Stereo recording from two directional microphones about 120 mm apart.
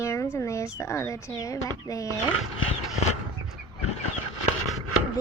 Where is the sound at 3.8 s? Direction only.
60° left (ahead or behind).